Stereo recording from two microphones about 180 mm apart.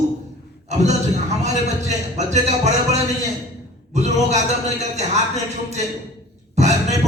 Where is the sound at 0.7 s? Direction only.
40° right (ahead or behind).